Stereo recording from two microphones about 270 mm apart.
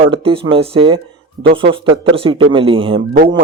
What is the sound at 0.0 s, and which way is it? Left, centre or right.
Speech, centre.